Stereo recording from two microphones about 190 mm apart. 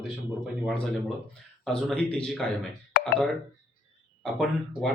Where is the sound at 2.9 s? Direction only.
60° left (ahead or behind).